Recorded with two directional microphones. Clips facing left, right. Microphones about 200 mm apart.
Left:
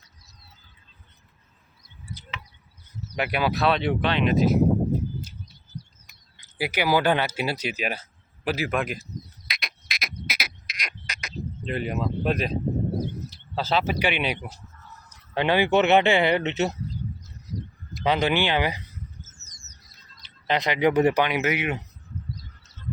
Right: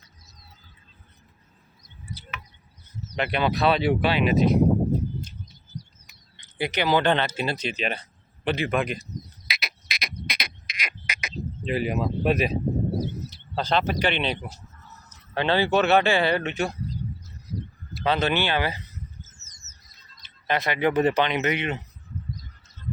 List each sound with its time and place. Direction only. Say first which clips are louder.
3.1 s speech: even; 10° left (ahead or behind)
6.1 s speech: right 2 dB; 5° left (ahead or behind)
9.5 s frog: right 2 dB; 5° right (ahead or behind)
13.3 s a sound: even; 5° left (ahead or behind)
14.0 s speech: even; 10° left (ahead or behind)
17.9 s speech: left 1 dB; 15° left (ahead or behind)
20.5 s speech: left 2 dB; 15° left (ahead or behind)